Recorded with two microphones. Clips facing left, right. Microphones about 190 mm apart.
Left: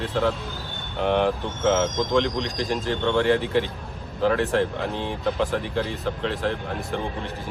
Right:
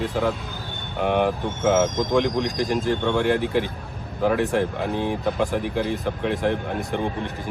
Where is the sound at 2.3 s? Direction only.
55° right (ahead or behind).